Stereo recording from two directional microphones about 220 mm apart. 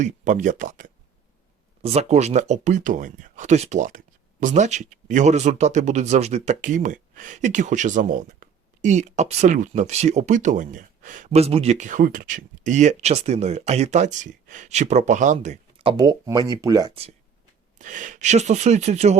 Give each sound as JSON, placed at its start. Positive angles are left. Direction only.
{"t": 0.0, "sound": "speech", "side_deg": -35}
{"t": 17.7, "sound": "speech", "side_deg": -35}